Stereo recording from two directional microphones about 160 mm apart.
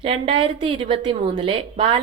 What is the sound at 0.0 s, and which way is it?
A woman's voice, 35° right (ahead or behind).